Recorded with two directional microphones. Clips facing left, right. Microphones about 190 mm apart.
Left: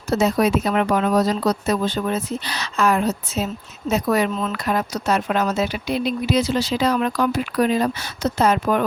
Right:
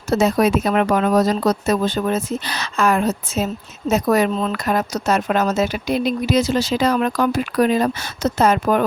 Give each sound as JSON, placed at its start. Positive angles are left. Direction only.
{"t": 0.1, "sound": "speech", "side_deg": -50}